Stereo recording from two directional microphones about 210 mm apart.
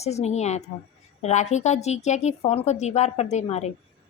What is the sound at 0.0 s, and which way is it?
A woman's voice, 30° left (ahead or behind).